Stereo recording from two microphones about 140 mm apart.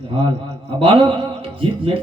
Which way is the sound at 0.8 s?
40° right (ahead or behind).